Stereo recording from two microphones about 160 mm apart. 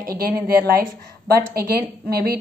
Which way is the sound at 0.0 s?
65° right (ahead or behind).